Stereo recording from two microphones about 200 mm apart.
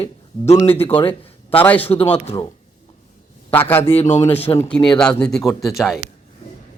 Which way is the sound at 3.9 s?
30° left (ahead or behind).